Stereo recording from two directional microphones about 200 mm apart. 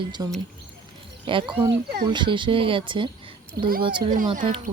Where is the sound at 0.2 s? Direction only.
15° right (ahead or behind).